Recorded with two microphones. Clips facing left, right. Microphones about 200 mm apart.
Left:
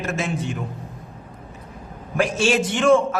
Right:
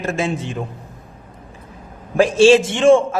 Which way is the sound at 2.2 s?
30° right (ahead or behind).